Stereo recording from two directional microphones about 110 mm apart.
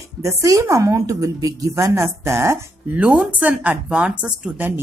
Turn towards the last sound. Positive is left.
turn(degrees=-15)  # may be behind; listen again after turning